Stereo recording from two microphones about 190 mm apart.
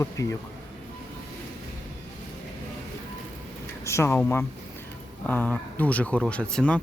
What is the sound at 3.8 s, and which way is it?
Speech, 15° left (ahead or behind).